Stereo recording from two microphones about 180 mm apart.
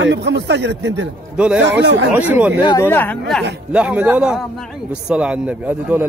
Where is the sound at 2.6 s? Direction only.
25° left (ahead or behind).